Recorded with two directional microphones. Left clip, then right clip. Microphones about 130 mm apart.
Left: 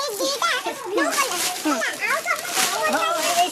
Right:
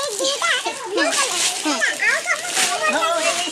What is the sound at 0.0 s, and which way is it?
Children playing, 10° left (ahead or behind).